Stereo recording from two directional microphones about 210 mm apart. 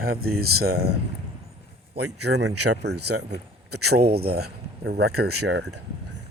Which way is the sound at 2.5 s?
90° right.